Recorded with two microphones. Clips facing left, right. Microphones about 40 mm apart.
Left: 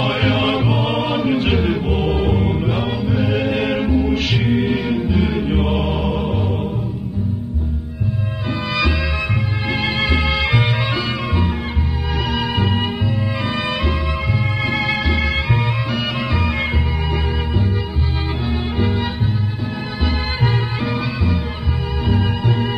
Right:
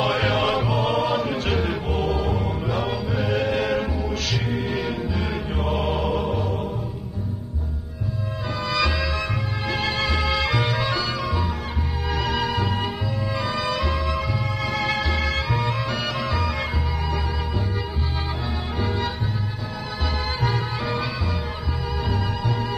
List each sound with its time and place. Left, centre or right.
0.0 s music: centre
2.1 s music: left
4.7 s music: centre
5.8 s music: centre
6.2 s music: left
8.7 s music: centre; by 11.5 s left
12.1 s music: centre
12.4 s music: left
13.8 s music: left
14.8 s music: centre
16.2 s music: left
18.8 s music: left
20.8 s music: centre
22.0 s music: left